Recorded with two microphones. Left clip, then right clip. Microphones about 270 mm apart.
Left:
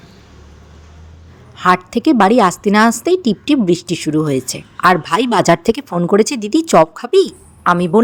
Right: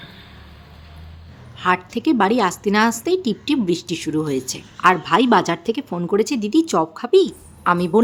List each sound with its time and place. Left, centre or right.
1.5 s a woman's voice: left